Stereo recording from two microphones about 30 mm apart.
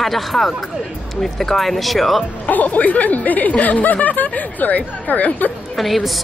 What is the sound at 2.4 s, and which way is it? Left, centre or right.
Speech, left.